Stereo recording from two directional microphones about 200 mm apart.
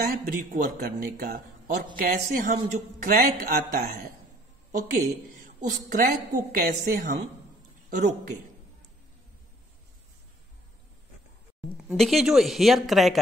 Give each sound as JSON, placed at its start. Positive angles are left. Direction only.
{"t": 0.0, "sound": "speech", "side_deg": -45}
{"t": 5.3, "sound": "a man's voice", "side_deg": -40}
{"t": 11.9, "sound": "speech", "side_deg": 0}